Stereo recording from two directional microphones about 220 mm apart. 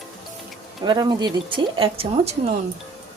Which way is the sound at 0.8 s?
20° right (ahead or behind).